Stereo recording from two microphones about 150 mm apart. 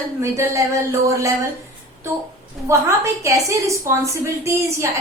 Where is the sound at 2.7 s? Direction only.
20° right (ahead or behind).